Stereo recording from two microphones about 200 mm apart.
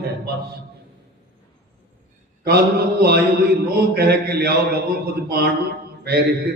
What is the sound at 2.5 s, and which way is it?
A man's voice, 50° right (ahead or behind).